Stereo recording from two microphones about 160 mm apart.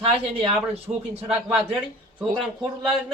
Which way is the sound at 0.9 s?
15° right (ahead or behind).